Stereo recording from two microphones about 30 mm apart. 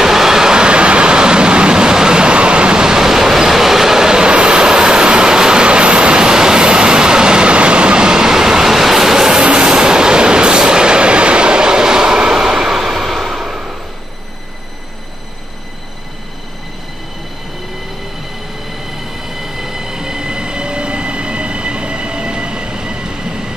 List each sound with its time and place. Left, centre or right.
0.0 s vehicle: centre
0.7 s vehicle: right; by 9.4 s centre
9.4 s train: right
12.2 s a sound: right
19.2 s train: centre; by 23.5 s right